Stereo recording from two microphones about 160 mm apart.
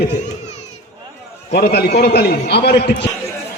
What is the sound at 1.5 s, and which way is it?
A man's voice, 90° left.